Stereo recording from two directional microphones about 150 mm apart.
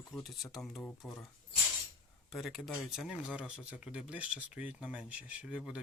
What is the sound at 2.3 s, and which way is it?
Speech, centre (ahead or behind).